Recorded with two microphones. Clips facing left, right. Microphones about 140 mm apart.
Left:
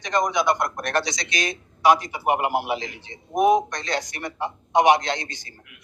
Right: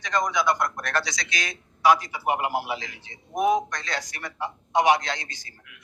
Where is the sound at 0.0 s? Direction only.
20° left (ahead or behind).